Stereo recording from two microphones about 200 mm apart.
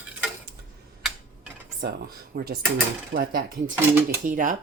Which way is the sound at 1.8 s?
50° right (ahead or behind).